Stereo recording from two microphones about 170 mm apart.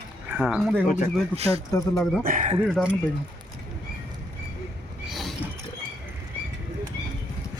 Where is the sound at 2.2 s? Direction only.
50° right (ahead or behind).